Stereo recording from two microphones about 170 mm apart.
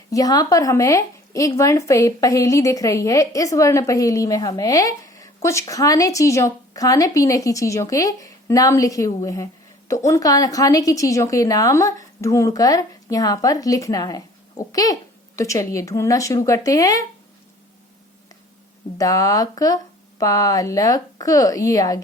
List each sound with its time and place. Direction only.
0.1 s a woman's voice: 20° left (ahead or behind)
18.9 s a woman's voice: 20° left (ahead or behind)